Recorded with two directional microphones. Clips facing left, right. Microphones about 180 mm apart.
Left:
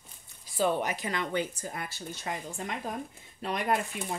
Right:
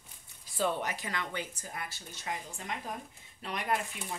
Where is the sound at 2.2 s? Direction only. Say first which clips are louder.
Left 2 dB; 50° left (ahead or behind).